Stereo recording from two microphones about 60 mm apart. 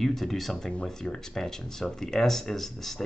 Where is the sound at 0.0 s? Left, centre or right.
Centre.